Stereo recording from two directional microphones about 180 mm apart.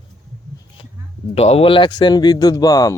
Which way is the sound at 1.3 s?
35° left (ahead or behind).